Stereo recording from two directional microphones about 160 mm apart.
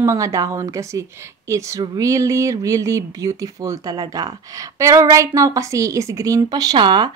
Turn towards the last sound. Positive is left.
turn(degrees=-30)  # may be behind; listen again after turning